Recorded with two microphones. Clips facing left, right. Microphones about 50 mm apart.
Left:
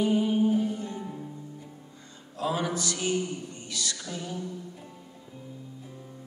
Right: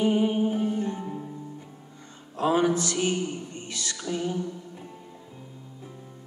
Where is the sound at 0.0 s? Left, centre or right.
Right.